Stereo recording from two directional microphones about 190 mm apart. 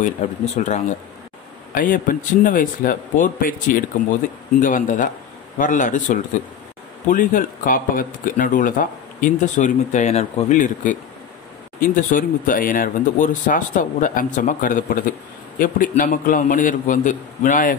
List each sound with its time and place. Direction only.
0.2 s speech: 35° left (ahead or behind)